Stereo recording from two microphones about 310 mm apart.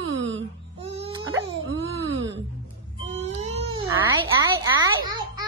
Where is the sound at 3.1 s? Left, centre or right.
Right.